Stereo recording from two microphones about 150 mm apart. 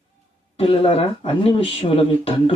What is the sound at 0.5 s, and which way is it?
Speech, 40° left (ahead or behind).